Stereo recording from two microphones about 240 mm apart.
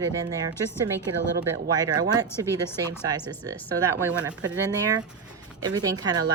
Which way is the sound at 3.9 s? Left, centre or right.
Centre.